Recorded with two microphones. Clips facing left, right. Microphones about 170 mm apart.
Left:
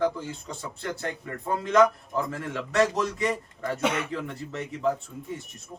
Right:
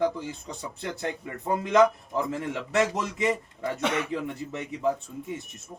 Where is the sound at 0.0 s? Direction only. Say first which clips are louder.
Even; 15° right (ahead or behind).